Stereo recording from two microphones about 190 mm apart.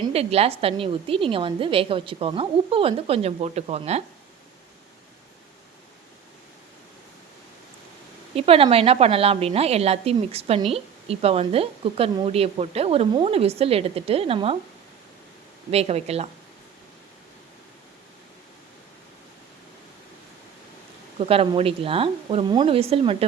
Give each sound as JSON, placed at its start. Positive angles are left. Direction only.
{"t": 0.0, "sound": "a woman's voice", "side_deg": -35}
{"t": 8.4, "sound": "a woman's voice", "side_deg": -30}
{"t": 15.7, "sound": "a woman's voice", "side_deg": -35}
{"t": 21.2, "sound": "a woman's voice", "side_deg": -30}